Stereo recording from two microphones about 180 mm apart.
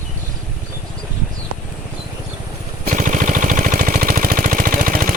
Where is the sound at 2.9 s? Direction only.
45° right (ahead or behind).